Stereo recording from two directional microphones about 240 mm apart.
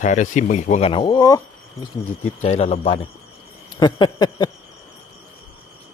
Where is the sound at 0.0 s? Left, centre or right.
Left.